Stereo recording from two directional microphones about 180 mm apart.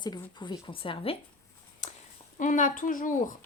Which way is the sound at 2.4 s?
45° left (ahead or behind).